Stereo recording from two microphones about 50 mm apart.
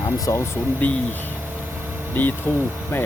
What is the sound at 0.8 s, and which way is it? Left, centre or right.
Speech, left.